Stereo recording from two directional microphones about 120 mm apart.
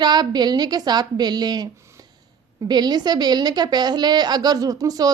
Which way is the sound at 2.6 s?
35° right (ahead or behind).